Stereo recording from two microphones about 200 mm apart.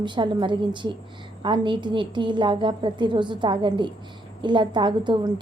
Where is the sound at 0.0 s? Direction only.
25° right (ahead or behind).